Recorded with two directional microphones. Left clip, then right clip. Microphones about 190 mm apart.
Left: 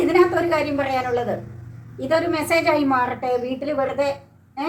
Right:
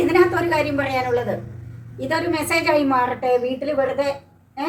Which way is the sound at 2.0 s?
15° right (ahead or behind).